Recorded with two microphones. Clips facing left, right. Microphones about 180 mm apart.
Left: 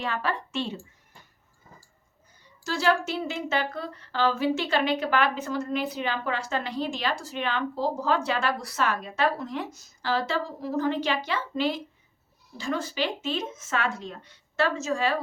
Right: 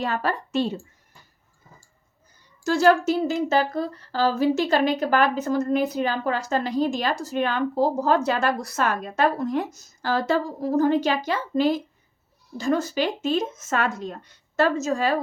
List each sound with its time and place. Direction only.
0.0 s a woman's voice: 40° right (ahead or behind)
2.6 s speech: 45° right (ahead or behind)